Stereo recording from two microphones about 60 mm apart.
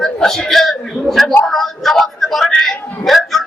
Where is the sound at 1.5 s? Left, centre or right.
Centre.